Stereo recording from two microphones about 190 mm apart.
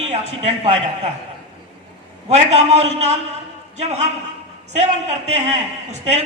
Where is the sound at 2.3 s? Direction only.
35° right (ahead or behind).